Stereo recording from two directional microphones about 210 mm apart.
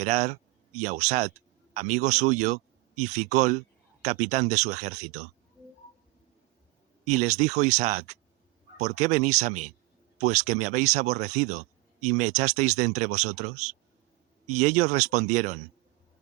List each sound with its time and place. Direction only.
0.0 s speech: 35° right (ahead or behind)
7.0 s speech: 35° right (ahead or behind)
13.3 s speech: 90° right
14.6 s speech: 35° right (ahead or behind)